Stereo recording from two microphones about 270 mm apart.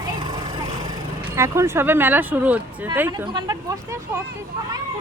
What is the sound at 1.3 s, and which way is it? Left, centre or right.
Speech, centre.